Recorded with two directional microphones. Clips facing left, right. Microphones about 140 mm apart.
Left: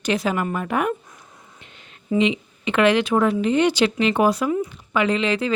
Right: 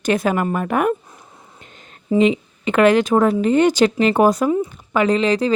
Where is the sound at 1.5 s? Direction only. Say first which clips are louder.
Right 3 dB; 40° right (ahead or behind).